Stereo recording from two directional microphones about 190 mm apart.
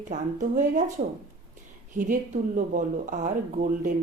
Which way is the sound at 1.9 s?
45° right (ahead or behind).